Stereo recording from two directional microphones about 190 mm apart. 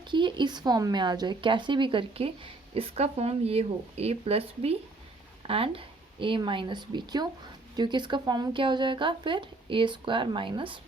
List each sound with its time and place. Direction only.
0.1 s speech: 25° right (ahead or behind)